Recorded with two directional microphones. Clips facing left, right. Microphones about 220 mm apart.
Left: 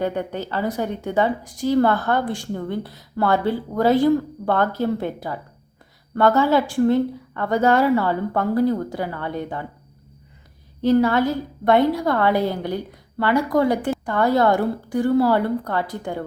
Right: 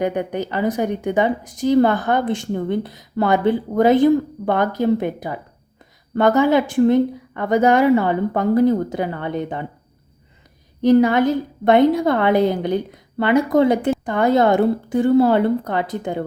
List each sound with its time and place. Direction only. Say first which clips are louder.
0.0 s a woman's voice: right 3 dB; 15° right (ahead or behind)
10.8 s a woman's voice: right 3 dB; 15° right (ahead or behind)